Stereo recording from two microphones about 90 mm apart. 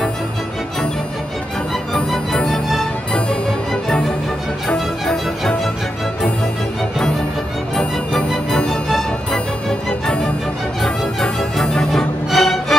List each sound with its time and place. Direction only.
2.0 s music: 5° left (ahead or behind)
7.7 s music: 5° left (ahead or behind)